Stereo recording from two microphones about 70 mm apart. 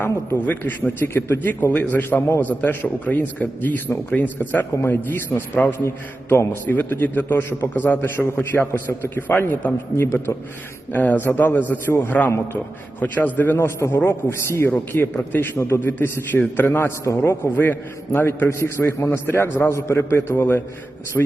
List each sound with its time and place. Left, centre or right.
0.3 s a man's voice: left
2.4 s a man's voice: left
5.6 s a man's voice: left
10.0 s a man's voice: left
10.9 s a man's voice: left
15.1 s a man's voice: left
15.5 s a man's voice: left
21.2 s a man's voice: centre